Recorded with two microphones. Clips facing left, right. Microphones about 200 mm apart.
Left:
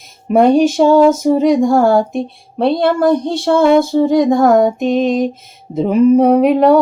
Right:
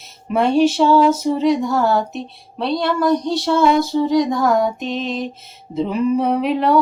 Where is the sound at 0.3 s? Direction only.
50° left (ahead or behind).